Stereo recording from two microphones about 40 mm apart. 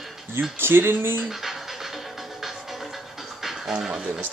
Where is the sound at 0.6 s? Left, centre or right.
Right.